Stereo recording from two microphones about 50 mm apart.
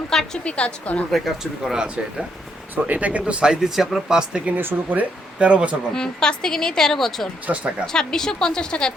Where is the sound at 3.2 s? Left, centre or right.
Centre.